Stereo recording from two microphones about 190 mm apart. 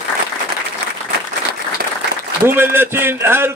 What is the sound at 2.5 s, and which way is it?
A man's voice, 10° right (ahead or behind).